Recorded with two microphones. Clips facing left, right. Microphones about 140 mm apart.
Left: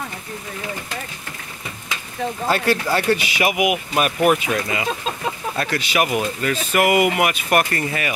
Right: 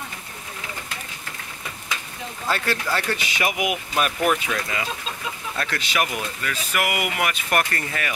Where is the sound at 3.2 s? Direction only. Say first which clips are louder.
Left 5 dB; 10° left (ahead or behind).